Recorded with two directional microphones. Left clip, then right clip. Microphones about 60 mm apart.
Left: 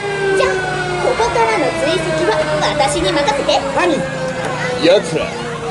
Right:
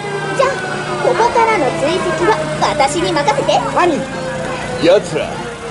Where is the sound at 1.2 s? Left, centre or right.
Right.